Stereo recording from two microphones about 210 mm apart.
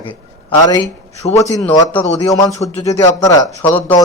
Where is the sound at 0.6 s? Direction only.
15° left (ahead or behind).